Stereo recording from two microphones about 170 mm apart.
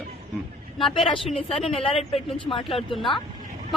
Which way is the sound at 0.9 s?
30° left (ahead or behind).